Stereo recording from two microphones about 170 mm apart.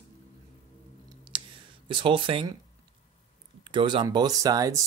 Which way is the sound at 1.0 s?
30° right (ahead or behind).